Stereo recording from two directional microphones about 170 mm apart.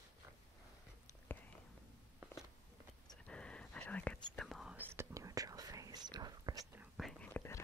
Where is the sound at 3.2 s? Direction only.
5° left (ahead or behind); by 6.6 s 25° right (ahead or behind).